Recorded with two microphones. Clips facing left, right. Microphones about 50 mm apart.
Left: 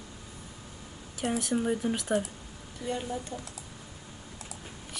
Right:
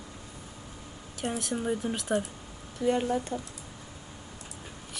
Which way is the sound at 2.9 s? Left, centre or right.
Right.